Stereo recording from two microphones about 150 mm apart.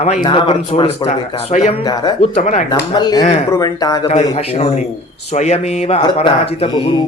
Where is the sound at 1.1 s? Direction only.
50° left (ahead or behind).